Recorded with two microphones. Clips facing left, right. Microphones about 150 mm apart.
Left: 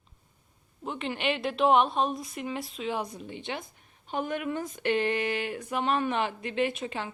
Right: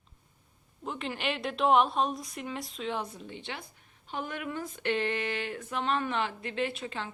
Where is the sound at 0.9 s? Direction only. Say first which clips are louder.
Left 3 dB; centre (ahead or behind).